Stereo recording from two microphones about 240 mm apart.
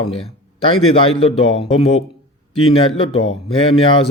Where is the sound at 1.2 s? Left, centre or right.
Left.